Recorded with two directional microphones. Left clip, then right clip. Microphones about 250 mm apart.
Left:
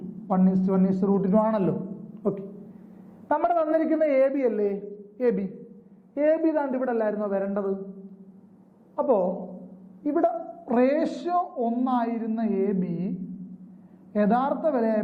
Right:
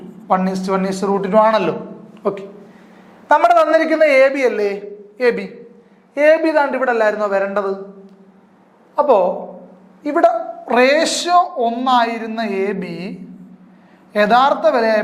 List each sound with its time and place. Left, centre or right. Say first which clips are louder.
0.3 s a man's voice: right 9 dB; centre
9.0 s a woman's voice: right 10 dB; centre